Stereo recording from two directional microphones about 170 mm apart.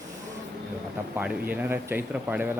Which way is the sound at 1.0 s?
10° right (ahead or behind).